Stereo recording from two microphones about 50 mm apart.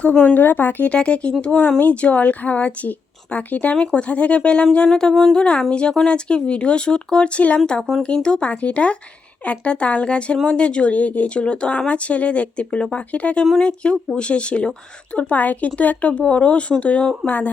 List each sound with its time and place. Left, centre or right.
0.0 s speech: left
0.3 s speech: left
0.9 s speech: left
4.9 s a sound: centre
5.4 s speech: left